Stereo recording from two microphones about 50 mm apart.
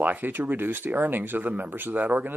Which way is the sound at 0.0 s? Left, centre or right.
Right.